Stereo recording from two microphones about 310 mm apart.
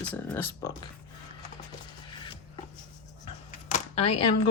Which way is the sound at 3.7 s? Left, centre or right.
Left.